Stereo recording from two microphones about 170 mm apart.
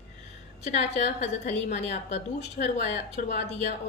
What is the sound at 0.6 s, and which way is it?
A woman's voice, 40° left (ahead or behind).